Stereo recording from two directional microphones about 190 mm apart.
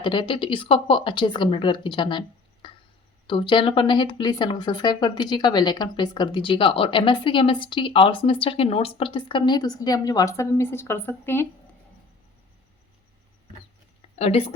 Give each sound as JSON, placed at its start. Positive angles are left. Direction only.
{"t": 0.0, "sound": "speech", "side_deg": 25}
{"t": 14.2, "sound": "a woman's voice", "side_deg": 35}